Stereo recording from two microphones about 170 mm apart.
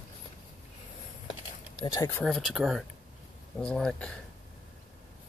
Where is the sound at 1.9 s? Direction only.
20° left (ahead or behind).